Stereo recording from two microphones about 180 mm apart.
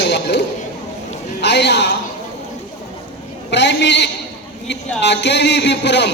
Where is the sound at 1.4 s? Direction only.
70° left (ahead or behind).